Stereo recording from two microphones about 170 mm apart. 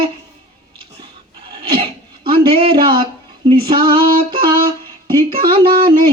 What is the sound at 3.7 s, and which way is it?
Female singing, 30° right (ahead or behind).